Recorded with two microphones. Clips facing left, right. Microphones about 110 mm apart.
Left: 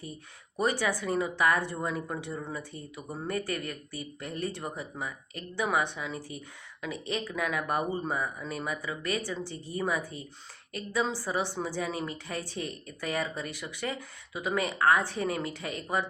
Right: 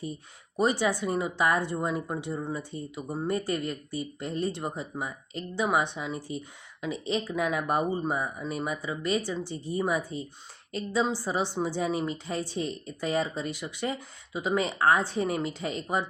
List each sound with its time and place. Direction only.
0.5 s speech: 20° right (ahead or behind)